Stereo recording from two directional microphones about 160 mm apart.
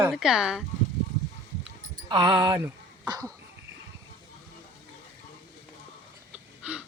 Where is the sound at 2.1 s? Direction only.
25° right (ahead or behind).